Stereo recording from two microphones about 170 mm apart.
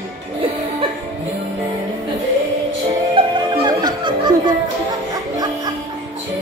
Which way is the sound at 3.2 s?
30° right (ahead or behind).